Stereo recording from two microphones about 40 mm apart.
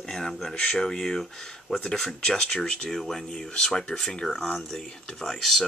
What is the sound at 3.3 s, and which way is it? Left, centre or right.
Speech, left.